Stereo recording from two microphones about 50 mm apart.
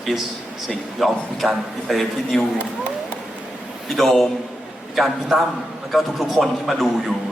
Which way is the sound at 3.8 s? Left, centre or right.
Centre.